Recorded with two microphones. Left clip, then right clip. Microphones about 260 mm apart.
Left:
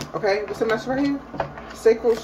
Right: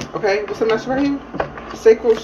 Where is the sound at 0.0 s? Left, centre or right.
Left.